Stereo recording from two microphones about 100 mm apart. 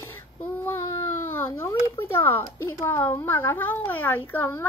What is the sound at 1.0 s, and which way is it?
A woman's voice, 25° left (ahead or behind).